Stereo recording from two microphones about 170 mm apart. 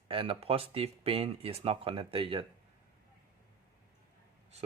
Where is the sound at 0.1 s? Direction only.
30° right (ahead or behind).